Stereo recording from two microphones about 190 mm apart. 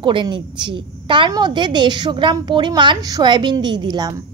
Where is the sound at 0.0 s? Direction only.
25° right (ahead or behind).